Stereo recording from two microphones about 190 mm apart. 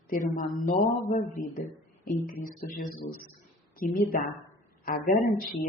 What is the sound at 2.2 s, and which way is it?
A man's voice, 45° left (ahead or behind).